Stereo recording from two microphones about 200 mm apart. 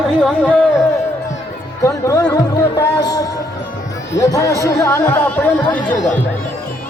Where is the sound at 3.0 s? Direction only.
20° left (ahead or behind).